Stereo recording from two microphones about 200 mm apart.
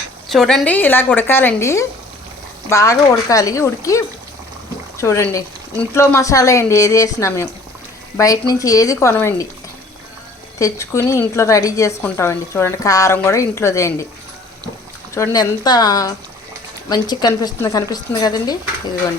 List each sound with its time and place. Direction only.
0.3 s a woman's voice: centre (ahead or behind)
10.6 s a woman's voice: 15° left (ahead or behind)
15.1 s a woman's voice: 15° left (ahead or behind)